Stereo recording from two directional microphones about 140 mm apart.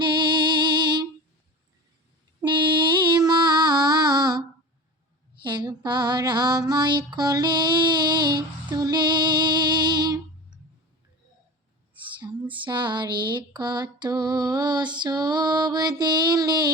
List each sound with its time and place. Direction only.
0.0 s music: 35° right (ahead or behind)
2.4 s mantra: 35° right (ahead or behind)
5.4 s female singing: 30° right (ahead or behind)
12.2 s a sound: 35° right (ahead or behind)